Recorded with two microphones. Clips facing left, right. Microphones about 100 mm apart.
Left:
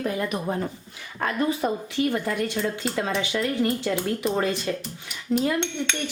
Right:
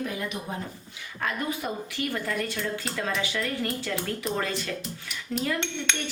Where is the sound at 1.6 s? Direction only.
35° left (ahead or behind).